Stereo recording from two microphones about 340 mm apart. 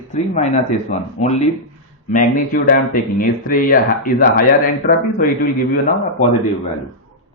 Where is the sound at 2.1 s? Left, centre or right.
Left.